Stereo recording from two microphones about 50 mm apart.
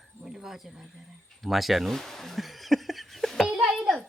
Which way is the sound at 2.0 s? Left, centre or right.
Centre.